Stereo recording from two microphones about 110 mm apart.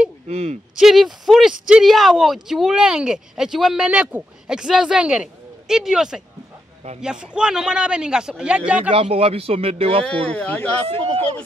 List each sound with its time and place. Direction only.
0.3 s speech: 70° right (ahead or behind)
0.7 s a man's voice: 5° right (ahead or behind)
8.9 s a man's voice: 65° right (ahead or behind)
10.0 s speech: 15° left (ahead or behind)